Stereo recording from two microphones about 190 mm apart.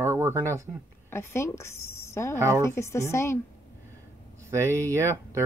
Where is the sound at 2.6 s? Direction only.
15° left (ahead or behind).